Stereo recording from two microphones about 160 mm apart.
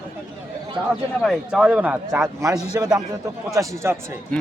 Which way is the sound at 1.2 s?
Centre (ahead or behind).